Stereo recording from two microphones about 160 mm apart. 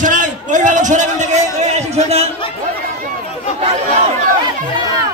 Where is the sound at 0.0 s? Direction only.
55° right (ahead or behind).